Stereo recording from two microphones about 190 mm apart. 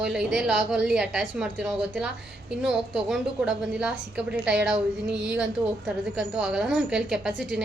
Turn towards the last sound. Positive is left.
turn(degrees=-5)  # may be behind; listen again after turning